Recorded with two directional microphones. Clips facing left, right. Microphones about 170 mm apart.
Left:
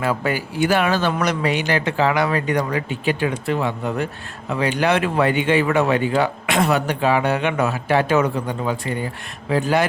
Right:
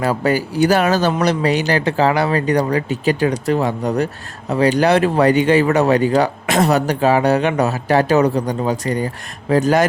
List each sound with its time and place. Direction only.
0.0 s a man's voice: 35° right (ahead or behind)